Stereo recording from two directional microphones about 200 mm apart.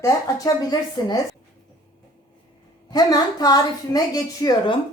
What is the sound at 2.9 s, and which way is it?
A woman's voice, 20° left (ahead or behind).